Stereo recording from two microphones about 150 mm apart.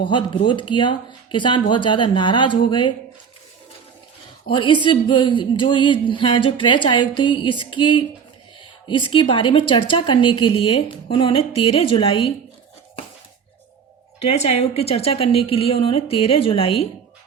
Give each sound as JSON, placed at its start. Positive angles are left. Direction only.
{"t": 0.0, "sound": "speech", "side_deg": 35}
{"t": 4.5, "sound": "speech", "side_deg": 35}
{"t": 14.2, "sound": "speech", "side_deg": 45}